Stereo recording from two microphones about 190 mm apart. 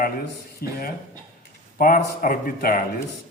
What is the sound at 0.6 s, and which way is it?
Speech, 55° left (ahead or behind).